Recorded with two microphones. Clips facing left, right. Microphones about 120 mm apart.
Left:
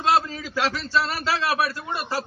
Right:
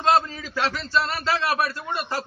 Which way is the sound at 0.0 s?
10° left (ahead or behind).